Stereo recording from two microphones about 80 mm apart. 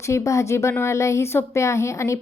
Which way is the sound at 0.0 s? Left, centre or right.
Left.